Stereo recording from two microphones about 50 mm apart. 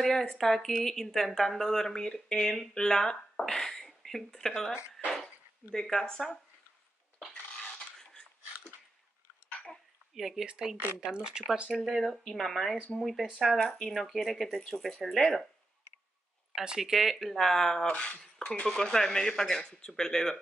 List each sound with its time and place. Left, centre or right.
0.2 s speech: centre
7.5 s filing: centre
10.1 s speech: centre
12.3 s speech: centre
13.6 s speech: centre
16.5 s speech: centre
16.9 s speech: centre
17.8 s speech: left
18.2 s speech: centre